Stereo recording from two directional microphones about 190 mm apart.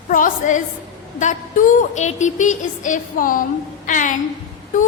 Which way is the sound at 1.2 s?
40° left (ahead or behind).